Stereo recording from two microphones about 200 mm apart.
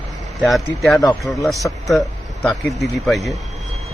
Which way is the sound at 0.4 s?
Centre (ahead or behind).